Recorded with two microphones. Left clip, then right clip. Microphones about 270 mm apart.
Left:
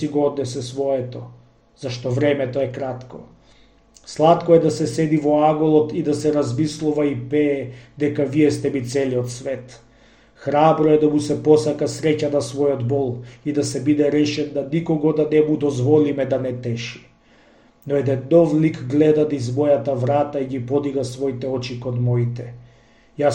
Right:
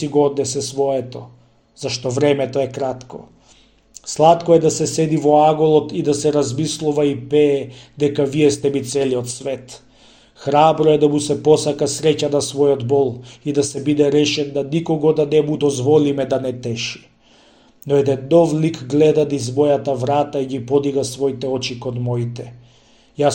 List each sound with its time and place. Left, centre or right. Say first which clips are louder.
0.0 s a man's voice: right 4 dB; right
1.8 s a man's voice: right 3 dB; right